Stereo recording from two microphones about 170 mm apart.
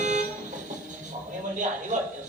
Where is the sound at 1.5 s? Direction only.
45° right (ahead or behind).